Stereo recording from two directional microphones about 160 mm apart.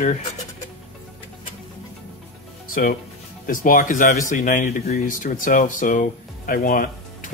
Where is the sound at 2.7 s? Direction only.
60° left (ahead or behind).